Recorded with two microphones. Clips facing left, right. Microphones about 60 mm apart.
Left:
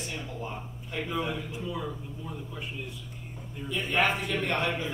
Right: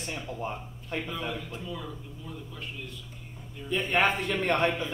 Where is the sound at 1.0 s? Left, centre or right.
Centre.